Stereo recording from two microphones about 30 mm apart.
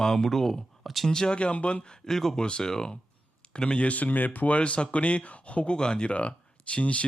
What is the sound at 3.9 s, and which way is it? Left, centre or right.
Speech, left.